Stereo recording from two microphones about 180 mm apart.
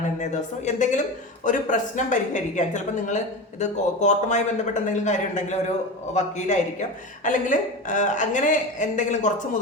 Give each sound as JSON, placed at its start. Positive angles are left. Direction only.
{"t": 0.2, "sound": "a man's voice", "side_deg": 40}